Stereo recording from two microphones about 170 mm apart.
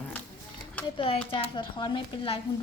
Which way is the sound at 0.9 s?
35° left (ahead or behind).